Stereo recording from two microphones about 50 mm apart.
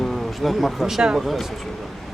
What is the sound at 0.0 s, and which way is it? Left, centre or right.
Speech, centre.